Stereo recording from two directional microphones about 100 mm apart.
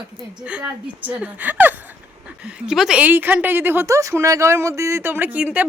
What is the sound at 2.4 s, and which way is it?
A woman's voice, 10° right (ahead or behind).